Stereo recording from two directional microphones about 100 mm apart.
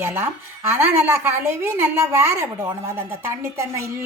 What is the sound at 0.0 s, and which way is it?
A woman's voice, 20° right (ahead or behind).